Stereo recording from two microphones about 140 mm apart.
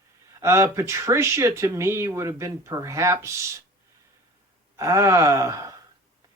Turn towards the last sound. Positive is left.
turn(degrees=-25)  # may be behind; listen again after turning